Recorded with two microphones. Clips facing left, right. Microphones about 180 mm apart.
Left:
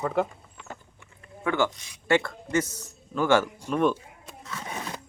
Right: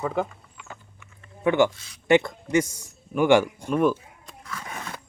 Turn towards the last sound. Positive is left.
turn(degrees=20)  # may be behind; listen again after turning